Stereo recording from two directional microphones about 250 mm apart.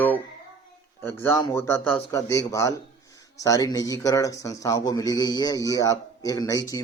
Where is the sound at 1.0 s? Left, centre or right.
Centre.